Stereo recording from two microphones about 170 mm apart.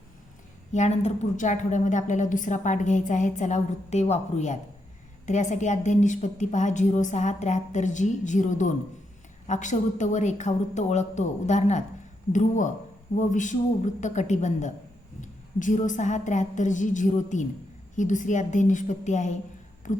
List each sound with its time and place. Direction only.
0.7 s a woman's voice: 40° left (ahead or behind)